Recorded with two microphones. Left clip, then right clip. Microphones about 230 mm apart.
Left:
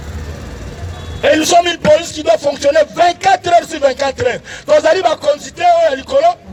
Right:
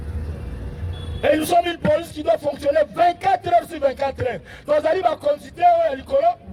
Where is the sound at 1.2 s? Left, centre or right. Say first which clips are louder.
Left 7 dB; left.